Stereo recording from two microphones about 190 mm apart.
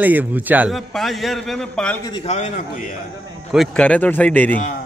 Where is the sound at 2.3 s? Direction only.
40° left (ahead or behind).